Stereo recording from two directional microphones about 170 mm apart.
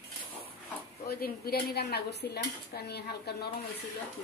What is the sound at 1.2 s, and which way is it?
Speech, 70° left (ahead or behind).